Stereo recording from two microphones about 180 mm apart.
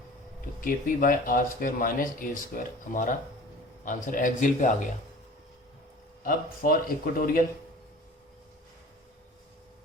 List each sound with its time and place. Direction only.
0.6 s speech: 50° left (ahead or behind)
6.2 s speech: 55° left (ahead or behind)